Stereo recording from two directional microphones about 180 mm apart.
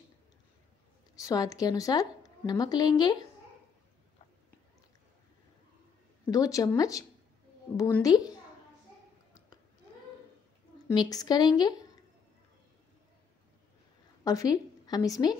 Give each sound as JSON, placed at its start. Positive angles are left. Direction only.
{"t": 1.2, "sound": "a woman's voice", "side_deg": 20}
{"t": 6.3, "sound": "a woman's voice", "side_deg": 20}
{"t": 10.9, "sound": "a woman's voice", "side_deg": 20}
{"t": 14.2, "sound": "a woman's voice", "side_deg": 20}